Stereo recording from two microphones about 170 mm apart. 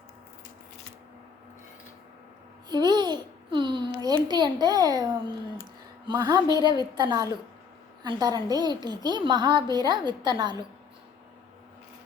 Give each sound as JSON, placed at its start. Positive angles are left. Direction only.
{"t": 2.6, "sound": "babbling", "side_deg": -25}
{"t": 6.1, "sound": "a woman's voice", "side_deg": -20}